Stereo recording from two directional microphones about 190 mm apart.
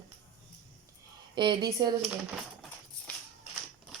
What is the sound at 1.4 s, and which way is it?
Speech, 25° right (ahead or behind).